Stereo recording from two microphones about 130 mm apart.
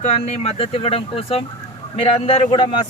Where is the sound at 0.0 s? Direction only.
55° left (ahead or behind).